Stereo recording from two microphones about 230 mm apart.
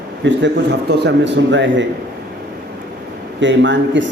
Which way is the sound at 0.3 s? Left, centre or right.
Right.